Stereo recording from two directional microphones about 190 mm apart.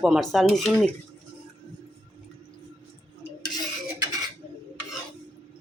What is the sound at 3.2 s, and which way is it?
Stir, 20° left (ahead or behind).